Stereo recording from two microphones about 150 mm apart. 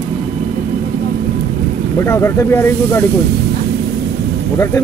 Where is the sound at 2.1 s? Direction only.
15° left (ahead or behind).